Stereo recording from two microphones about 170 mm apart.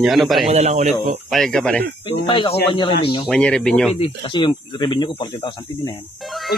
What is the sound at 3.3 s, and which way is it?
Speech, 5° left (ahead or behind).